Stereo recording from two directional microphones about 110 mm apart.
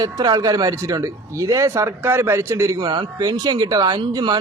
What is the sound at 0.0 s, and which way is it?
A man's voice, 35° right (ahead or behind).